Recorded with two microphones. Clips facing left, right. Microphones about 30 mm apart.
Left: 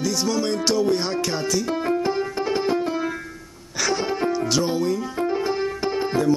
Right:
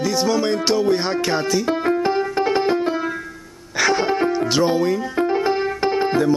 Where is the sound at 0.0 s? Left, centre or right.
Centre.